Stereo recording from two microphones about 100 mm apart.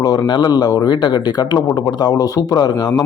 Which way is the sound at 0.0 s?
45° left (ahead or behind).